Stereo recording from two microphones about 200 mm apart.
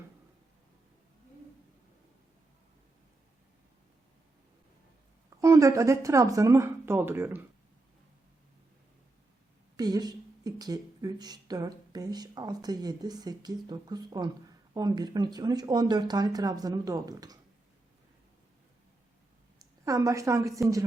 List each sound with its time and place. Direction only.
5.4 s speech: 15° right (ahead or behind)
9.7 s a woman's voice: 20° right (ahead or behind)
19.8 s speech: 15° right (ahead or behind)